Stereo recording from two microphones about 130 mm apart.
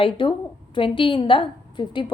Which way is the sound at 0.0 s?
40° left (ahead or behind).